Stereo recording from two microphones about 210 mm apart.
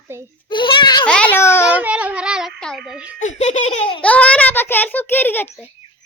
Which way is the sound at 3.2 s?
35° left (ahead or behind).